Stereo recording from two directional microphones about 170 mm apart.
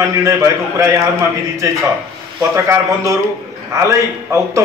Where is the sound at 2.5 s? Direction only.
20° right (ahead or behind).